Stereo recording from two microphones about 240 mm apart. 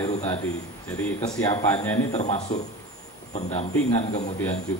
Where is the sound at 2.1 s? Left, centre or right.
Left.